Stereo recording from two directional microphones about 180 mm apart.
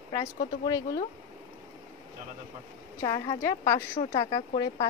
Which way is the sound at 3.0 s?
20° left (ahead or behind).